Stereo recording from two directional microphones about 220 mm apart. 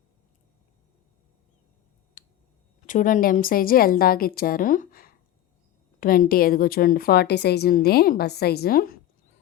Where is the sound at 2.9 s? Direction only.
35° left (ahead or behind).